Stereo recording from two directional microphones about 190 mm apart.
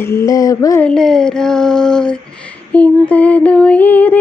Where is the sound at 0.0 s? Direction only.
15° left (ahead or behind).